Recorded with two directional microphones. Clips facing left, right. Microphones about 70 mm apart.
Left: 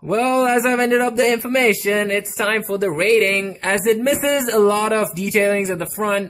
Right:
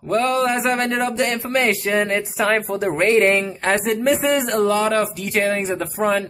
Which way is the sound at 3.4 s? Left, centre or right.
Centre.